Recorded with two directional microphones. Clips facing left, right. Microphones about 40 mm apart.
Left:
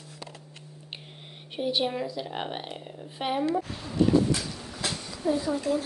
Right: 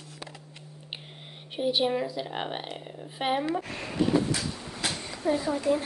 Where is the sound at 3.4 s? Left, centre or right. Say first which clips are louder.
Left 3 dB; right.